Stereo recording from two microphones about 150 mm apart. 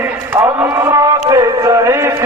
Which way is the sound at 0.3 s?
20° right (ahead or behind).